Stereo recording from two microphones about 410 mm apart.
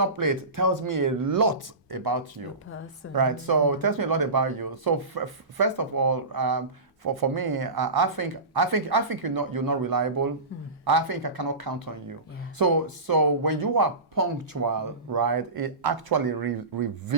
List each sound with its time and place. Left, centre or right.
0.0 s speech: right
1.5 s speech: right